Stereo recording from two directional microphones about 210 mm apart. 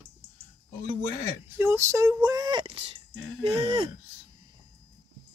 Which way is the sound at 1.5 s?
10° right (ahead or behind).